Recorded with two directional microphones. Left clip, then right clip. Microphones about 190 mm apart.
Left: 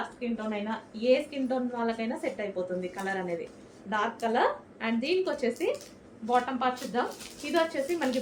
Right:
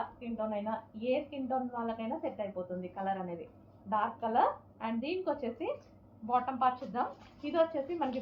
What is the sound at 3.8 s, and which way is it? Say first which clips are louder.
A woman's voice: left 3 dB; 20° left (ahead or behind).